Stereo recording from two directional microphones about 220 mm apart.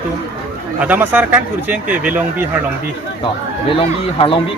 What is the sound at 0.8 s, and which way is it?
Speech, 5° right (ahead or behind).